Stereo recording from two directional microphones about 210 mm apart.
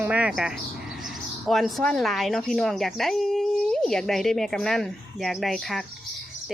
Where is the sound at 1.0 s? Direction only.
Centre (ahead or behind).